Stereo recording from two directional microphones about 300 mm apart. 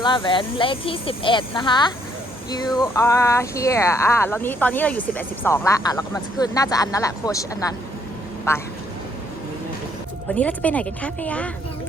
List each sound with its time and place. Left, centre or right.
0.0 s speech: centre
10.3 s a woman's voice: centre